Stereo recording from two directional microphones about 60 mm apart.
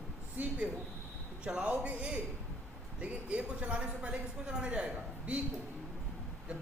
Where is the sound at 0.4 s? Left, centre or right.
Right.